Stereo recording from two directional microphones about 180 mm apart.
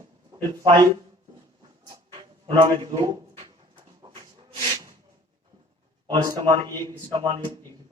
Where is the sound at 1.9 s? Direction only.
25° right (ahead or behind).